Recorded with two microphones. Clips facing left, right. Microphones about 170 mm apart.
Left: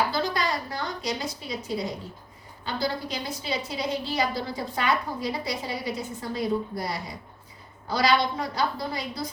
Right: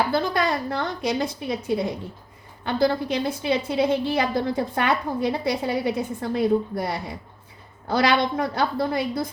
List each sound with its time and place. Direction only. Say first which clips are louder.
0.1 s a woman's voice: right 5 dB; 55° right (ahead or behind)